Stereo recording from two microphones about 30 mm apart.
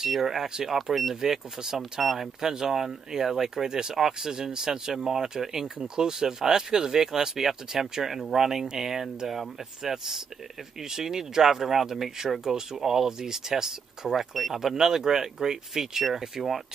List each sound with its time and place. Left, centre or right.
0.0 s speech: centre
3.9 s speech: centre
4.3 s speech: right
14.1 s speech: centre